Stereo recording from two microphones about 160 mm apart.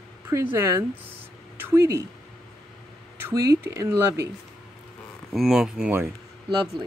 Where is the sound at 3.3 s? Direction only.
20° right (ahead or behind).